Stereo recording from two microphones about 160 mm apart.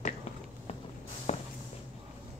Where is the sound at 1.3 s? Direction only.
45° left (ahead or behind).